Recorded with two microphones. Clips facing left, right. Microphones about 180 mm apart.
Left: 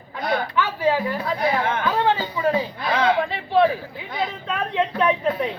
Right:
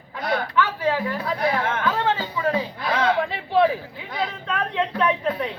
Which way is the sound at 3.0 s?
10° left (ahead or behind).